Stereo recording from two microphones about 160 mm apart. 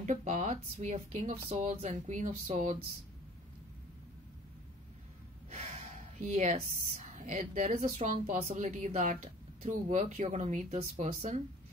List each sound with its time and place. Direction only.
0.0 s a woman's voice: 50° right (ahead or behind)
6.1 s a woman's voice: 50° right (ahead or behind)